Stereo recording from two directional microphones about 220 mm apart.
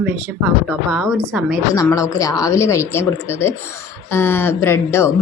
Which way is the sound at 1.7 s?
15° left (ahead or behind).